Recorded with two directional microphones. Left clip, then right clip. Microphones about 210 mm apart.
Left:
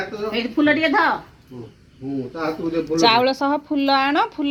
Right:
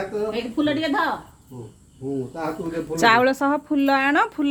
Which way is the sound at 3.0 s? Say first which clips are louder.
Even; 25° right (ahead or behind).